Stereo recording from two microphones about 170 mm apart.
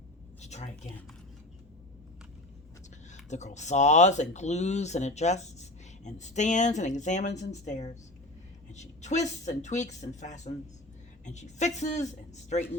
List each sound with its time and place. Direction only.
0.4 s a woman's voice: 40° left (ahead or behind)
3.1 s speech: 45° left (ahead or behind)